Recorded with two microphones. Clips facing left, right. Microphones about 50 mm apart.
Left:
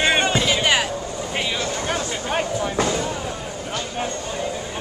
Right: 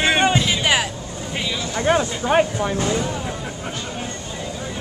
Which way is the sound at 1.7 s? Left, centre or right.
Right.